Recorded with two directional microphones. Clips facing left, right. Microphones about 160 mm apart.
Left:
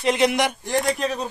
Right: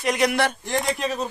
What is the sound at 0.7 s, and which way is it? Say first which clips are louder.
Speech: left 2 dB; centre (ahead or behind).